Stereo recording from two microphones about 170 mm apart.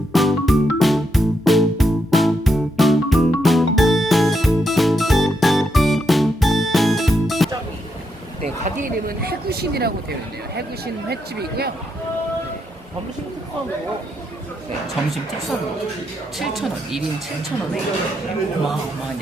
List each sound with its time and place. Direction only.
0.1 s music: centre (ahead or behind)
8.4 s a sound: 45° right (ahead or behind); by 9.9 s 70° right (ahead or behind)
11.1 s speech: 70° right (ahead or behind)
16.4 s speech: centre (ahead or behind)